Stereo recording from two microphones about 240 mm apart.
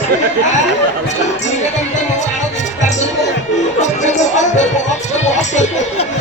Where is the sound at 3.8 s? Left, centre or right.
Left.